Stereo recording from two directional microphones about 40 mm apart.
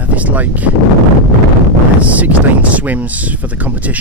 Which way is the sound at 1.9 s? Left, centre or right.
Right.